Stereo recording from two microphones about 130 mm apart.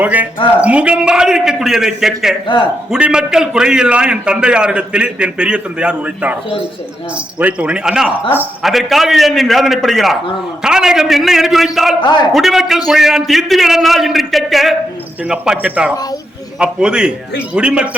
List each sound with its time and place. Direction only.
0.0 s a man's voice: 10° right (ahead or behind)
7.3 s a man's voice: 10° right (ahead or behind)
12.0 s a man's voice: 35° left (ahead or behind)
12.3 s a man's voice: centre (ahead or behind)